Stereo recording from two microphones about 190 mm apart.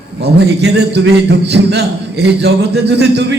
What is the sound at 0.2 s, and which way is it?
A man's voice, 65° right (ahead or behind).